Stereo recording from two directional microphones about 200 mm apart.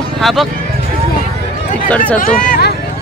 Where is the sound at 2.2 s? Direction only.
45° left (ahead or behind).